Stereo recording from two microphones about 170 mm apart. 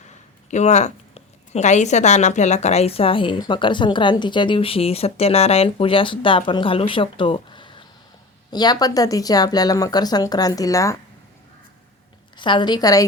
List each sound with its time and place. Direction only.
0.5 s speech: 40° left (ahead or behind); by 10.9 s 20° left (ahead or behind)
12.4 s speech: 25° left (ahead or behind)